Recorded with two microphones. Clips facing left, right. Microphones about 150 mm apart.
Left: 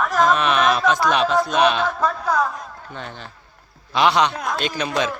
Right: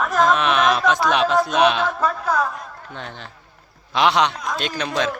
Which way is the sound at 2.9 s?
5° left (ahead or behind).